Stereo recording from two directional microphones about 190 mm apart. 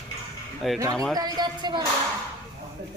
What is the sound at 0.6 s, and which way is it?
Speech, centre (ahead or behind).